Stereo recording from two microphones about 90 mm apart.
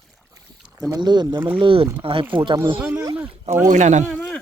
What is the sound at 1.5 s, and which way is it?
Speech, 75° right (ahead or behind).